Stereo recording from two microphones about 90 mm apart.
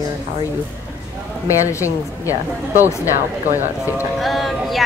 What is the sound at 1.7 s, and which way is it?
Speech, 35° left (ahead or behind).